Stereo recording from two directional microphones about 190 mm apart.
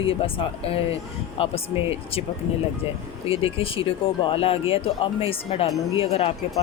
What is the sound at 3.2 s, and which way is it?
Speech, 30° left (ahead or behind).